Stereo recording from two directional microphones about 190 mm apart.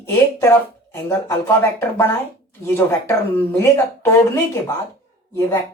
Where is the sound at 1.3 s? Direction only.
15° left (ahead or behind).